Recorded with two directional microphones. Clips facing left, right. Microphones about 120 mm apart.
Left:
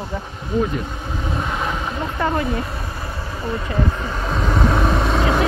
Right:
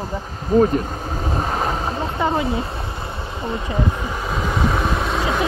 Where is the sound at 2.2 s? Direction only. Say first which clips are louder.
Even; 20° right (ahead or behind); by 5.2 s centre (ahead or behind).